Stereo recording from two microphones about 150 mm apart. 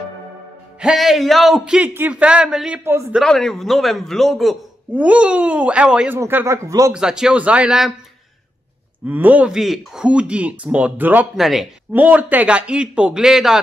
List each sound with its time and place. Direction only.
0.7 s a man's voice: 5° right (ahead or behind)
2.8 s speech: 15° right (ahead or behind)
3.2 s a man's voice: 5° left (ahead or behind); by 6.9 s 20° right (ahead or behind)
6.9 s a man's voice: 5° right (ahead or behind)
9.0 s speech: 10° right (ahead or behind)